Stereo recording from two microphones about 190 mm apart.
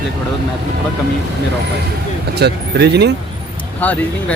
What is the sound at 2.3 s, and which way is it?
Speech, 60° right (ahead or behind).